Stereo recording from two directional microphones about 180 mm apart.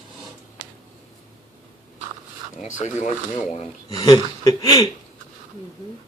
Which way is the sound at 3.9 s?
20° left (ahead or behind).